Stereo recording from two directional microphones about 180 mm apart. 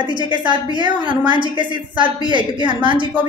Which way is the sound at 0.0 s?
25° right (ahead or behind).